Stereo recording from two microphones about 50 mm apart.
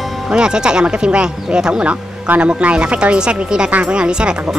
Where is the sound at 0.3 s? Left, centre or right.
Centre.